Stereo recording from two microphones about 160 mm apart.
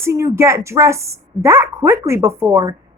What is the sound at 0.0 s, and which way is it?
A woman's voice, 15° right (ahead or behind).